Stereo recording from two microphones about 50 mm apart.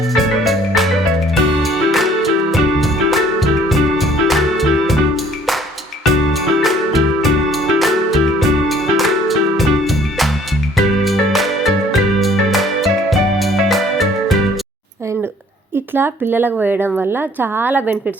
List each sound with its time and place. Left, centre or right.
0.1 s music: centre
15.7 s a woman's voice: right